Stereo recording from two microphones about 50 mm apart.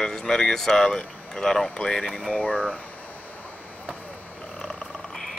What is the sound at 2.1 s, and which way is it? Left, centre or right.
Speech, left.